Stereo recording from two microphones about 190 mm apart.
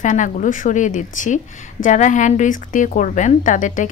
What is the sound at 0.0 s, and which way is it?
A woman's voice, 40° left (ahead or behind).